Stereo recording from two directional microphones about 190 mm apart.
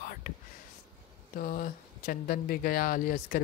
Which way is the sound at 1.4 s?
45° left (ahead or behind).